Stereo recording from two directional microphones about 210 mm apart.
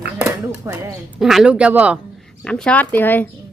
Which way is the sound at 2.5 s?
5° left (ahead or behind).